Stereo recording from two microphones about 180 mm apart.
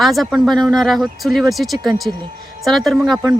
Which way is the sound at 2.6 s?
Centre (ahead or behind).